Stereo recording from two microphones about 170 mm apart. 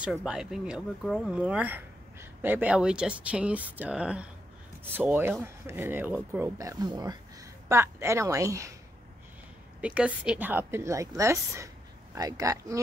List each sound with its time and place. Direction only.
0.0 s speech: 5° right (ahead or behind)
9.8 s speech: 5° right (ahead or behind)